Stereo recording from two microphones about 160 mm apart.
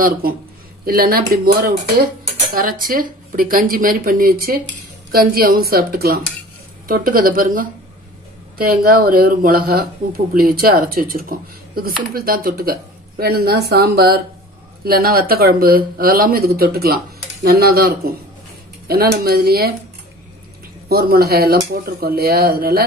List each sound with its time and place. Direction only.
0.8 s speech: 70° right (ahead or behind)
20.9 s speech: 70° right (ahead or behind)